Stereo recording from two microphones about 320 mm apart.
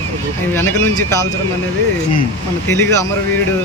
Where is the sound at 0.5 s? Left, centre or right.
Centre.